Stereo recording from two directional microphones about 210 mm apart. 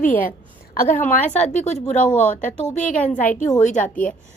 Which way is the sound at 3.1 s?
10° left (ahead or behind).